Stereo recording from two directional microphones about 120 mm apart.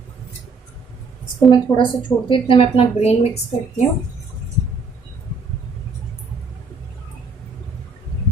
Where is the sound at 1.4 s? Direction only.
40° left (ahead or behind); by 3.2 s 55° left (ahead or behind).